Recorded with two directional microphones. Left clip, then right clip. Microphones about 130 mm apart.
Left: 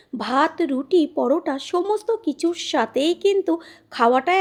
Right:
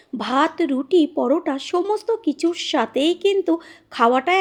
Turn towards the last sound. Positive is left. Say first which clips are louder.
# right 1 dB
turn(degrees=-55)  # may be behind; listen again after turning